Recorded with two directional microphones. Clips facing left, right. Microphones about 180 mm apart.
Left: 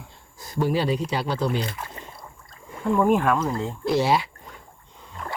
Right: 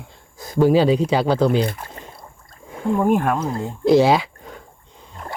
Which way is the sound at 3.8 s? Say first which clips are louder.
Right 8 dB; 90° right.